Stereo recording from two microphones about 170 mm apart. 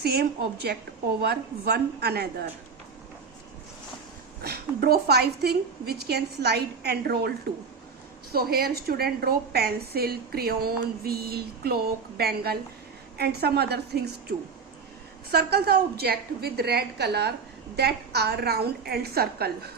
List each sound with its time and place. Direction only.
0.0 s a woman's voice: 70° right (ahead or behind)
4.4 s a woman's voice: 65° right (ahead or behind)